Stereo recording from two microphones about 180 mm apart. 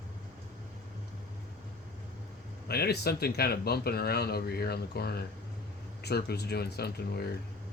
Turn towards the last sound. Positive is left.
turn(degrees=60)  # may be behind; listen again after turning